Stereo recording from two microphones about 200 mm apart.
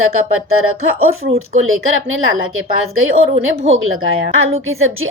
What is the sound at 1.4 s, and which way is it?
Speech, 90° right.